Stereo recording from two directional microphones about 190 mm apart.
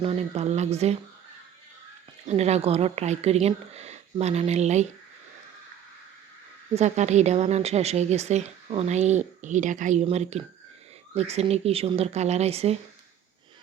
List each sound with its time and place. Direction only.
0.0 s a woman's voice: 30° right (ahead or behind)
2.2 s a woman's voice: 35° right (ahead or behind)
6.7 s a woman's voice: 35° right (ahead or behind)